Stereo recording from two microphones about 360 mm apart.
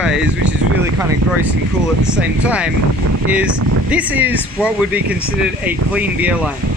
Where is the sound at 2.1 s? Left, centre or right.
Centre.